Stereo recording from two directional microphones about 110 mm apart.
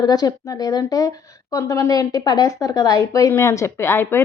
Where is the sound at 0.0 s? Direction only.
35° left (ahead or behind).